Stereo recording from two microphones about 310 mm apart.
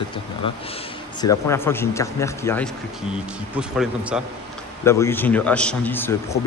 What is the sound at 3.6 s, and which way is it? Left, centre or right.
Speech, centre.